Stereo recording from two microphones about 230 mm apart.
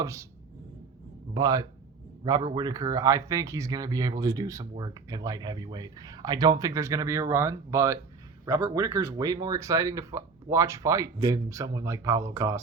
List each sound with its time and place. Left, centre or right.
0.0 s speech: centre
1.3 s speech: centre